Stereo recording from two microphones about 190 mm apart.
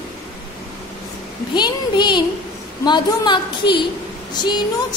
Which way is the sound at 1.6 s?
25° left (ahead or behind).